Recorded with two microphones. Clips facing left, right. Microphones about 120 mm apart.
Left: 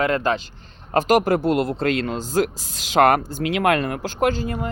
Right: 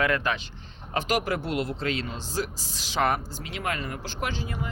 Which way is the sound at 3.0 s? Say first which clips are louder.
Left 9 dB; 70° left (ahead or behind).